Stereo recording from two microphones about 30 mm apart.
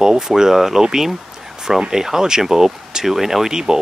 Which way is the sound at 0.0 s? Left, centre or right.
Centre.